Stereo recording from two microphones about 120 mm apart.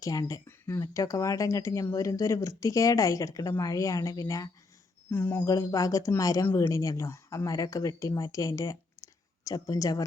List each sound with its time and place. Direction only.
0.0 s speech: 30° left (ahead or behind)
5.1 s speech: 15° left (ahead or behind)
5.5 s speech: 30° left (ahead or behind)